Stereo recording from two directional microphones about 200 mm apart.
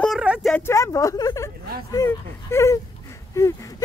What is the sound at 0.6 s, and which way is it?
Speech, 15° left (ahead or behind).